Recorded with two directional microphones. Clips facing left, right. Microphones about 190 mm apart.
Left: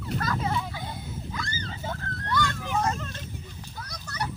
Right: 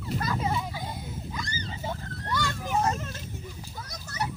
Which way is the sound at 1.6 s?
10° right (ahead or behind).